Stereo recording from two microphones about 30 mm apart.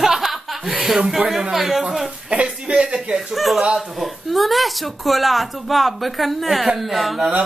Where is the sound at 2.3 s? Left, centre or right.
Right.